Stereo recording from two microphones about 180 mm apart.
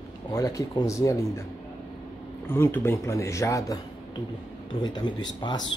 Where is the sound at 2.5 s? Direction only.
10° left (ahead or behind).